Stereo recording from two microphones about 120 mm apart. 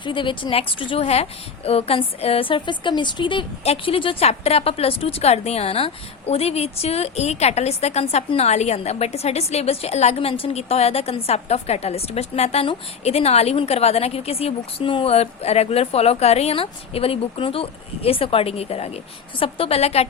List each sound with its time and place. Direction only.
0.0 s a woman's voice: 40° left (ahead or behind); by 20.1 s 60° left (ahead or behind)